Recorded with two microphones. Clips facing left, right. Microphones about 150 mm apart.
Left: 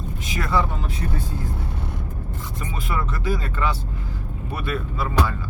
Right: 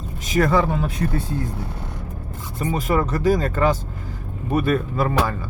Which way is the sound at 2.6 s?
40° right (ahead or behind).